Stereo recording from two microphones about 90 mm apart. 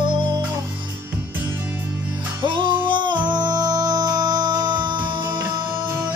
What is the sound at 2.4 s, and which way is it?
Music, 65° right (ahead or behind).